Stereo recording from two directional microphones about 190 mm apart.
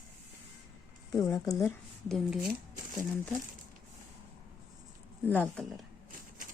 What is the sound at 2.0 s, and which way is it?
Speech, centre (ahead or behind).